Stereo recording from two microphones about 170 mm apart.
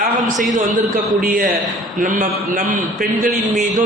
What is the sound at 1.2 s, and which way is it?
A man's voice, 55° right (ahead or behind).